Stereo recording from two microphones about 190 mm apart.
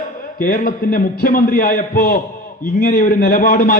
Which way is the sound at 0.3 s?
45° left (ahead or behind).